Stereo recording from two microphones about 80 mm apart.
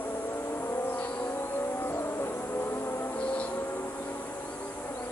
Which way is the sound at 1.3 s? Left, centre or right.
Left.